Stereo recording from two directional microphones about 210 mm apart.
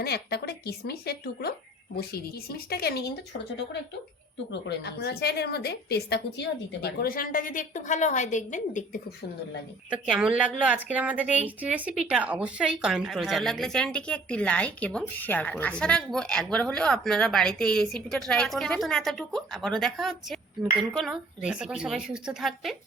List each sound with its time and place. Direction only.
0.0 s a woman's voice: 50° left (ahead or behind)
9.9 s a woman's voice: 5° right (ahead or behind)